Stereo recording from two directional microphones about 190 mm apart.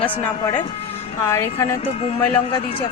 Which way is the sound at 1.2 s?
15° left (ahead or behind).